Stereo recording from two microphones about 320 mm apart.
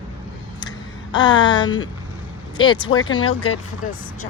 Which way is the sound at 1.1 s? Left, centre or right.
Centre.